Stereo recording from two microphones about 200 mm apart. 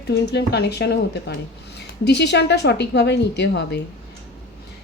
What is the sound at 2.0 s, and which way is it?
A woman's voice, 55° left (ahead or behind).